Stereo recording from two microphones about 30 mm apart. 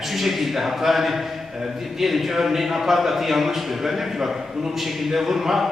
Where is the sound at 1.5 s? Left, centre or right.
Centre.